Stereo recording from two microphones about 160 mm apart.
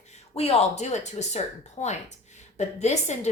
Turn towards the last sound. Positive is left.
turn(degrees=45)  # may be behind; listen again after turning